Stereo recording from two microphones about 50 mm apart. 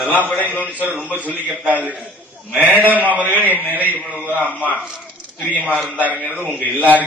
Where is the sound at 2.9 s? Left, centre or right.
Right.